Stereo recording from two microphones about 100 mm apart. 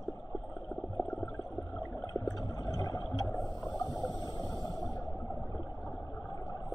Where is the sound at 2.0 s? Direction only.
40° left (ahead or behind).